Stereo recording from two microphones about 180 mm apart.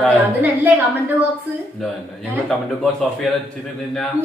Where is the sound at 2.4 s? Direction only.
5° left (ahead or behind).